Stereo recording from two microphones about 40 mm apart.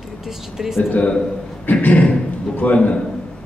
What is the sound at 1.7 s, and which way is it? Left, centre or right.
A man's voice, left.